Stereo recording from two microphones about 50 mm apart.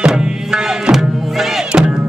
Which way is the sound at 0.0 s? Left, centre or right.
Centre.